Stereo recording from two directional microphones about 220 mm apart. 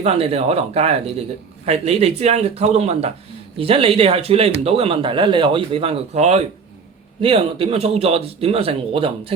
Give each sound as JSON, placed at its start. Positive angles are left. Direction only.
{"t": 0.0, "sound": "speech", "side_deg": -30}